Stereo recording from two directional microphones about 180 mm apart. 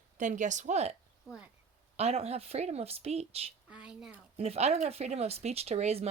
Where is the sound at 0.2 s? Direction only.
45° right (ahead or behind).